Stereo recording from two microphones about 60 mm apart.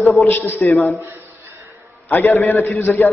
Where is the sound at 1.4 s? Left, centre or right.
Right.